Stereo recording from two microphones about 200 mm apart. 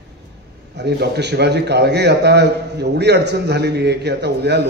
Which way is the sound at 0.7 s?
55° right (ahead or behind).